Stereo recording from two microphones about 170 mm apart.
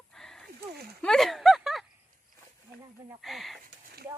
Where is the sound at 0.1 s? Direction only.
Centre (ahead or behind).